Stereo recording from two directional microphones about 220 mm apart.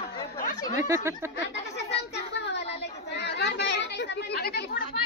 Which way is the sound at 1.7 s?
50° left (ahead or behind).